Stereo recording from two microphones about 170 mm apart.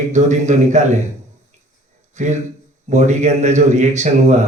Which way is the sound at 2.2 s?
45° right (ahead or behind).